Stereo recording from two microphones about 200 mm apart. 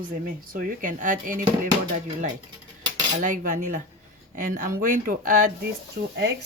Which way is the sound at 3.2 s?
40° right (ahead or behind).